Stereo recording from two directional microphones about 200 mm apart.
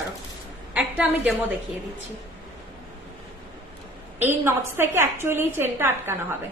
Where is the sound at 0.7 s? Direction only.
5° right (ahead or behind).